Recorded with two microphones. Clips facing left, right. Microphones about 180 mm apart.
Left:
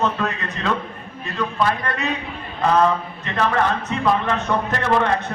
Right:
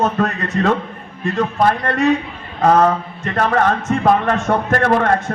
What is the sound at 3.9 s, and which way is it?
A man's voice, 50° right (ahead or behind).